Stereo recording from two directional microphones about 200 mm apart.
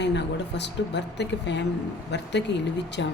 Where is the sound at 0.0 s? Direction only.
60° left (ahead or behind).